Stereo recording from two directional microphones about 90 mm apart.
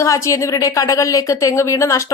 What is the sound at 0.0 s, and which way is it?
A woman's voice, 35° left (ahead or behind).